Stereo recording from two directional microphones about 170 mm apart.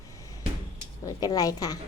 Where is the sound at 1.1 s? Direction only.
20° left (ahead or behind).